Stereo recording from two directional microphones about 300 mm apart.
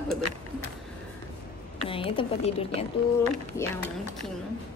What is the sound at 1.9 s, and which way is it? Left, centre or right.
Speech, centre.